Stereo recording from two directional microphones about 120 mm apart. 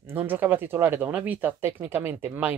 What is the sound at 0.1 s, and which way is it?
Speech, 15° right (ahead or behind).